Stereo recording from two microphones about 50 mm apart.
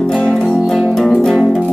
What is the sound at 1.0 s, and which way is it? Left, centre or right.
Music, centre.